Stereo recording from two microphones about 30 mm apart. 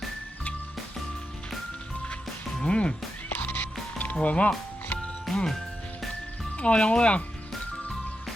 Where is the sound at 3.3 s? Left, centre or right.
Left.